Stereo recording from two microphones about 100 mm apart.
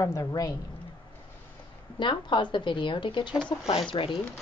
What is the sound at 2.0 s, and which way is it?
A woman's voice, 55° left (ahead or behind).